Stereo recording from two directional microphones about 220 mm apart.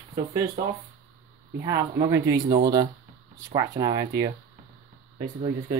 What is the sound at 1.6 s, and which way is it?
Speech, 15° right (ahead or behind).